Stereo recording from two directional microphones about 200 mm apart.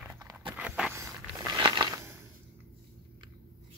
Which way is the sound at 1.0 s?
15° right (ahead or behind).